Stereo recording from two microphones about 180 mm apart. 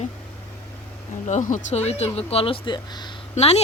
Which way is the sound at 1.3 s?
40° left (ahead or behind).